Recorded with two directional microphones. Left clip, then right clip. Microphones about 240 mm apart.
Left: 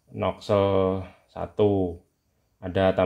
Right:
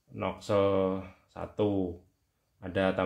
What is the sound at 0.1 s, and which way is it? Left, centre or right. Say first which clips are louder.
Speech: left 6 dB; left.